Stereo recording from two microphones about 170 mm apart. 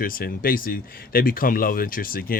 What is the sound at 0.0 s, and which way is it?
Speech, 55° left (ahead or behind).